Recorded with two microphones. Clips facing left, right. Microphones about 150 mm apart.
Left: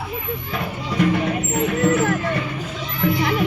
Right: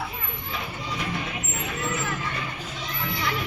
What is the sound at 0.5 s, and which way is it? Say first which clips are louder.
Vehicle: left 8 dB; 60° left (ahead or behind).